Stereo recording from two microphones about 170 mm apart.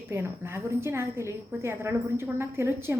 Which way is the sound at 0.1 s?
15° right (ahead or behind).